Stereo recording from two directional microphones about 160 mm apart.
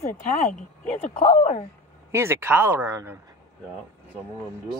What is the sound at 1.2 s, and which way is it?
Speech, 45° left (ahead or behind).